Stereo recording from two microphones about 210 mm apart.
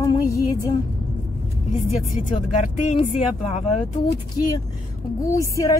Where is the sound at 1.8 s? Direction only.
35° left (ahead or behind).